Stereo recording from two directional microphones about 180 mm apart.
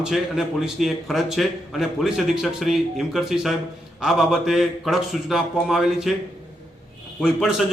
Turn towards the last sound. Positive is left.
turn(degrees=-5)  # may be behind; listen again after turning